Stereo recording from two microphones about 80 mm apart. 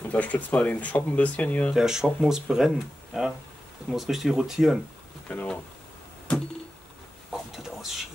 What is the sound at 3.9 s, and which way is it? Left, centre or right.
Speech, centre.